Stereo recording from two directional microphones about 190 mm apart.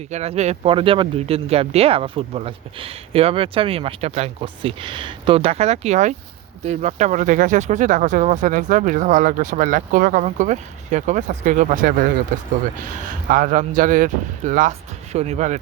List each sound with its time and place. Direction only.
0.1 s speech: 35° right (ahead or behind)